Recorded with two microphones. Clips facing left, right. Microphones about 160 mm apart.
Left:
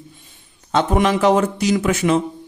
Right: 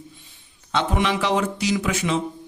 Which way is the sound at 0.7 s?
45° left (ahead or behind).